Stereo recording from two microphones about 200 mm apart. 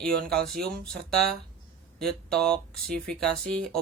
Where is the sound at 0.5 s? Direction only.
50° right (ahead or behind).